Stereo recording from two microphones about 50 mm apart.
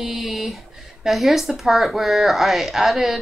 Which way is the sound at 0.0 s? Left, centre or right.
Centre.